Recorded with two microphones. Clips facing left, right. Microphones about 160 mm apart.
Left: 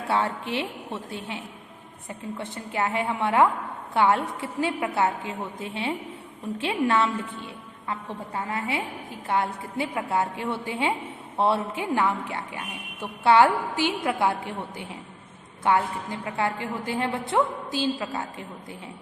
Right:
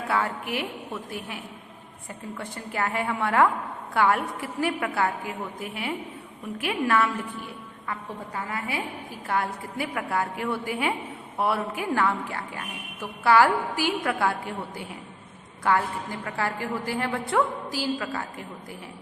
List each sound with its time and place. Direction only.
0.1 s a woman's voice: 25° left (ahead or behind)